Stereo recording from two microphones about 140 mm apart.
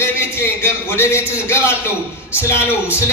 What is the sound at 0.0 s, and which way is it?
A man's voice, 15° left (ahead or behind).